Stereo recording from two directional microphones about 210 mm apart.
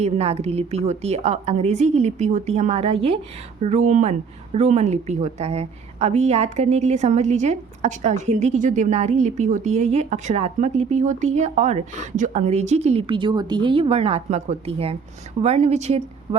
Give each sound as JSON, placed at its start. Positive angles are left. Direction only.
{"t": 0.0, "sound": "a woman's voice", "side_deg": -30}